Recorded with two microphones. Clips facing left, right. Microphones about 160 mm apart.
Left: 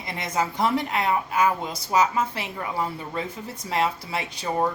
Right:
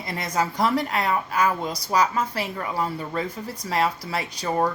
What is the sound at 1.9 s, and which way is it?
A woman's voice, 35° right (ahead or behind).